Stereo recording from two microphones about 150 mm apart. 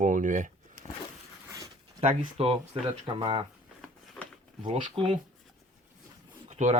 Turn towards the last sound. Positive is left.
turn(degrees=-50)  # may be behind; listen again after turning